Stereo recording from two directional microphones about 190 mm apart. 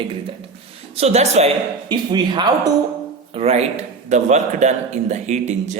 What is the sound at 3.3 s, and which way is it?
A man's voice, 35° right (ahead or behind).